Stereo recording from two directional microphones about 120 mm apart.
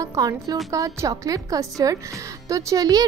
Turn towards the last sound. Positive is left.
turn(degrees=-30)  # may be behind; listen again after turning